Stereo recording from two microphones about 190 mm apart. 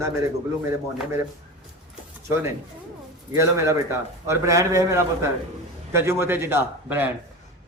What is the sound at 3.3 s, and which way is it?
A man's voice, 15° right (ahead or behind).